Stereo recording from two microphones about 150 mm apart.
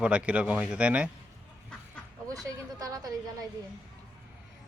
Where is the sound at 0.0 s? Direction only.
10° right (ahead or behind).